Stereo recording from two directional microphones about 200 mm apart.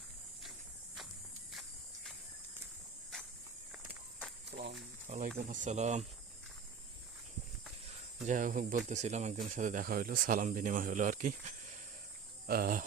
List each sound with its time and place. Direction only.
4.5 s a sound: 45° right (ahead or behind)
5.0 s speech: 35° right (ahead or behind)
7.9 s cricket: 35° right (ahead or behind)
8.9 s speech: 35° right (ahead or behind)